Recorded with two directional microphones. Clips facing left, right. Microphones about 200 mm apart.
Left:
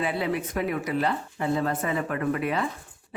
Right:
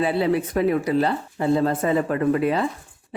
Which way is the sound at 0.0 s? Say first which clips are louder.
Right 6 dB; 30° right (ahead or behind).